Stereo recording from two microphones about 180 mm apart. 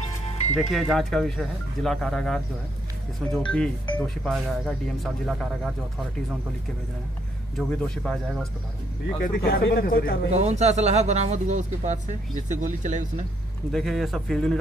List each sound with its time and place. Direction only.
0.6 s speech: centre (ahead or behind)
3.4 s speech: 5° left (ahead or behind)
7.5 s speech: 5° left (ahead or behind)
9.2 s speech: 60° left (ahead or behind)
10.3 s speech: 40° right (ahead or behind)
13.7 s speech: centre (ahead or behind)